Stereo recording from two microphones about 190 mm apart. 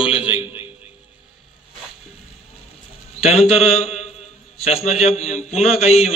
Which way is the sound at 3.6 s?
35° left (ahead or behind).